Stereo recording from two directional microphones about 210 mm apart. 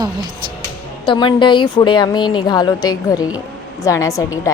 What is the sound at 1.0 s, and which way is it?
A woman's voice, 25° left (ahead or behind).